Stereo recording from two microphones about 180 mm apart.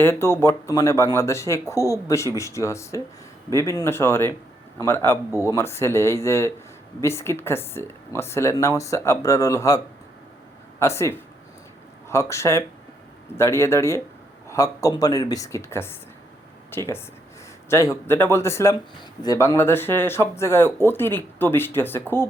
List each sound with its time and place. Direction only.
0.0 s speech: 15° left (ahead or behind)